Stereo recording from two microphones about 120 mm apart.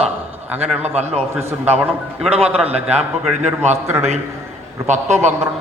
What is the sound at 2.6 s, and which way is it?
Speech, 60° right (ahead or behind).